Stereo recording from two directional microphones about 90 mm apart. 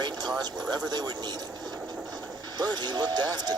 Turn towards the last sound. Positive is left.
turn(degrees=-50)  # may be behind; listen again after turning